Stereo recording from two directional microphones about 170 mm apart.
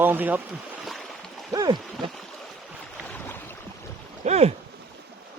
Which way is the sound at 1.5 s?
25° right (ahead or behind).